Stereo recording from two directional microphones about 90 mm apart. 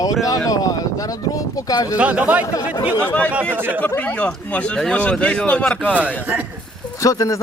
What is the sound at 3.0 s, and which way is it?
Speech, 15° left (ahead or behind).